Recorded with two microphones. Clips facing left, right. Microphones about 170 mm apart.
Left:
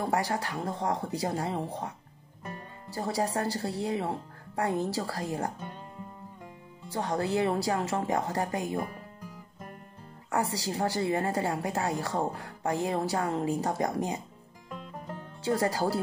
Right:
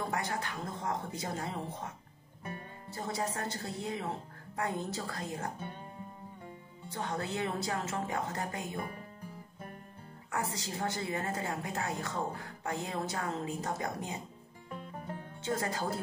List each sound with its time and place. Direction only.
0.0 s speech: 35° left (ahead or behind)
6.9 s speech: 35° left (ahead or behind)
10.3 s speech: 35° left (ahead or behind)
15.4 s speech: 35° left (ahead or behind)